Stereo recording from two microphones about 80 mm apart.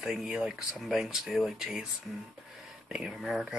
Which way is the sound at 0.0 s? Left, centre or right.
Centre.